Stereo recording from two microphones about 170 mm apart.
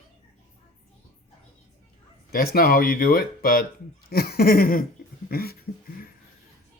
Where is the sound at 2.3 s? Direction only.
60° left (ahead or behind).